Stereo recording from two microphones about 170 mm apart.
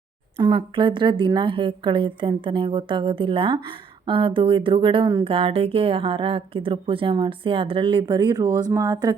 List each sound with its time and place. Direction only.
0.3 s a woman's voice: 30° right (ahead or behind)